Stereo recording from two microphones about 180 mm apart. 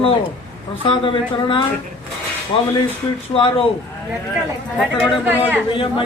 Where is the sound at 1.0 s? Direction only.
30° left (ahead or behind).